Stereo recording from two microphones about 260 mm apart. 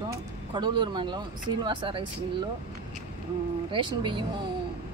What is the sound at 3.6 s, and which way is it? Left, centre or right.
Speech, centre.